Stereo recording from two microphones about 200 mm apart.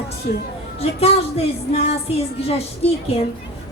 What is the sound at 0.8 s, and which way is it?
Speech, 30° left (ahead or behind).